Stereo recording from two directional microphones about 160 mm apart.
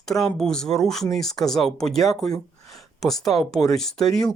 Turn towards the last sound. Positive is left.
turn(degrees=5)  # may be behind; listen again after turning